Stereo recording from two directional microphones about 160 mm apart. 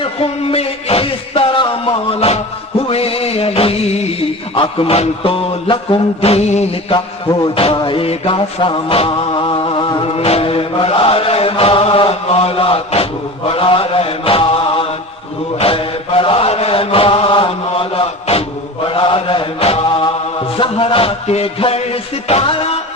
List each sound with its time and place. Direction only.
0.0 s music: 35° left (ahead or behind)
6.9 s mantra: 25° left (ahead or behind)
20.6 s music: 35° left (ahead or behind)